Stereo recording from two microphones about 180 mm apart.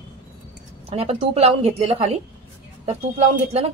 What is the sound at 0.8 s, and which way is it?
A woman's voice, 35° right (ahead or behind).